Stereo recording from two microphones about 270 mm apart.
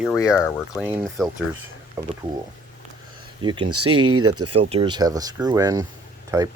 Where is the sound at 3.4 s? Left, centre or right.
Centre.